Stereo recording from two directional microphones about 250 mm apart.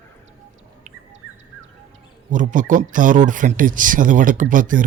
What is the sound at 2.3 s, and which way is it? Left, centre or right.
Speech, right.